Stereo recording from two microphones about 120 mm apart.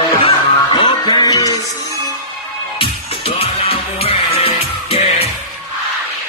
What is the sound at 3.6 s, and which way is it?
Music, 55° left (ahead or behind).